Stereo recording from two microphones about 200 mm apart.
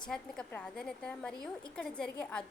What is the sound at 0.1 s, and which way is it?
A woman's voice, 5° left (ahead or behind).